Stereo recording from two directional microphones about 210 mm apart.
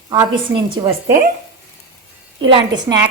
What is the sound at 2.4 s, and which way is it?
Speech, 20° right (ahead or behind).